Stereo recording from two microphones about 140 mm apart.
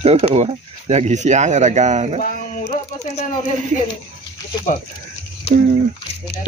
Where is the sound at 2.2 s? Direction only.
80° left.